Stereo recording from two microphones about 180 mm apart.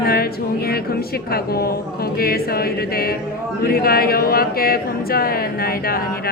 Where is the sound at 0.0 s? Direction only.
55° left (ahead or behind).